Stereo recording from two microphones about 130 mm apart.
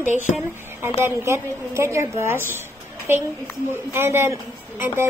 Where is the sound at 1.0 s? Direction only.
20° right (ahead or behind).